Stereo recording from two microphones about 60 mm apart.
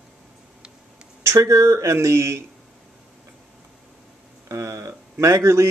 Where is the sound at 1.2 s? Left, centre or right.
Right.